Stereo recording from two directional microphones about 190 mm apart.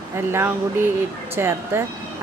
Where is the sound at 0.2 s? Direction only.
10° right (ahead or behind).